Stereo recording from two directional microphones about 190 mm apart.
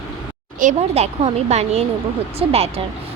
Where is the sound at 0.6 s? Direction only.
40° right (ahead or behind).